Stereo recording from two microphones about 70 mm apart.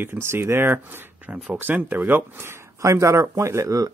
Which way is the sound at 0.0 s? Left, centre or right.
Right.